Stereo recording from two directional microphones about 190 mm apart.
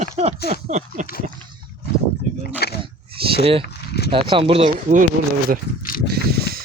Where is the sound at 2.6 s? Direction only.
55° left (ahead or behind).